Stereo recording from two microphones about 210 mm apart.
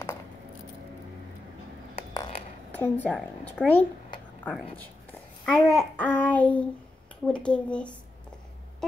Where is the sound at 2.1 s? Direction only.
20° left (ahead or behind).